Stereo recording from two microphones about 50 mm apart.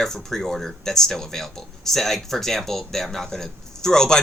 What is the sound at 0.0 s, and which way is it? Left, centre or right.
Speech, centre.